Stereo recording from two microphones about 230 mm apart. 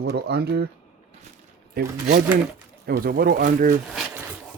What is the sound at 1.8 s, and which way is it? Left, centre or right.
Speech, right.